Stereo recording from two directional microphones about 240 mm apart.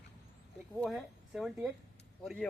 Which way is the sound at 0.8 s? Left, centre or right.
Centre.